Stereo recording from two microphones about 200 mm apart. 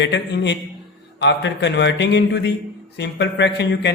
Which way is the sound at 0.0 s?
60° left (ahead or behind).